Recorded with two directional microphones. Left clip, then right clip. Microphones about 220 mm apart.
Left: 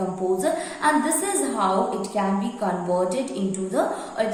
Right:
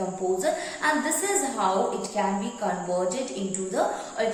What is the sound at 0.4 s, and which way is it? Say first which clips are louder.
A woman's voice: left 3 dB; 15° left (ahead or behind).